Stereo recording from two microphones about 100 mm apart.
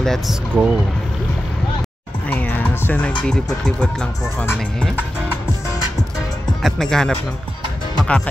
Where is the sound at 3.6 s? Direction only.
10° left (ahead or behind).